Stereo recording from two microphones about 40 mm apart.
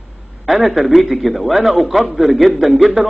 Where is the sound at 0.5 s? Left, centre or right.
Centre.